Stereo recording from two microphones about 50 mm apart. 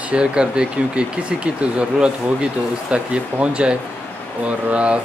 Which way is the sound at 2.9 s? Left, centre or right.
Right.